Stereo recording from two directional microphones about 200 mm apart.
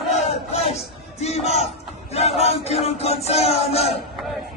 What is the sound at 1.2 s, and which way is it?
Speech, 30° left (ahead or behind).